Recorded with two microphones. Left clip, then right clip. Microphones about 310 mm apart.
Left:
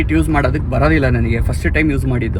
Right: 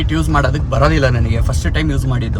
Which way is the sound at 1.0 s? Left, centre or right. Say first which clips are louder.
Even; right.